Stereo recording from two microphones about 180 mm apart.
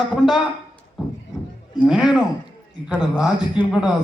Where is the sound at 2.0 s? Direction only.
25° left (ahead or behind).